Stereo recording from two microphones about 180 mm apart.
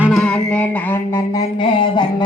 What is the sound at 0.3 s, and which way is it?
Music, 10° left (ahead or behind).